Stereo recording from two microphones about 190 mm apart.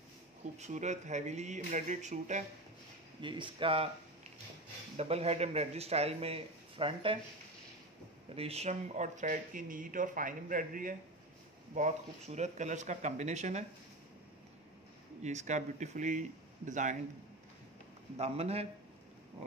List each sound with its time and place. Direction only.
0.6 s a man's voice: 40° right (ahead or behind)
3.2 s speech: 25° right (ahead or behind)
4.9 s a man's voice: 35° right (ahead or behind)
8.4 s a man's voice: 30° right (ahead or behind)
15.2 s a man's voice: 40° right (ahead or behind)
18.1 s a man's voice: 35° right (ahead or behind)